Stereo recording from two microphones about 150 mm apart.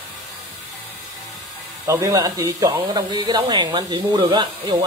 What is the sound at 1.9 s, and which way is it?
Speech, 25° right (ahead or behind).